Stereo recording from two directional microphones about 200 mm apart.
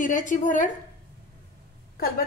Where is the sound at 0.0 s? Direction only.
40° left (ahead or behind).